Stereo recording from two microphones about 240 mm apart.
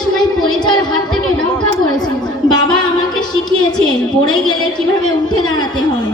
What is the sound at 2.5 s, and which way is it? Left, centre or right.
Music, centre.